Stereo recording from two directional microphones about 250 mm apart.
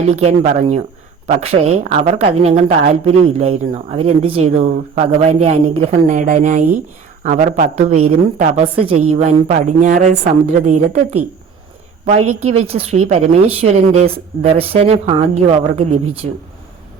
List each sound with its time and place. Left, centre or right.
0.1 s speech: right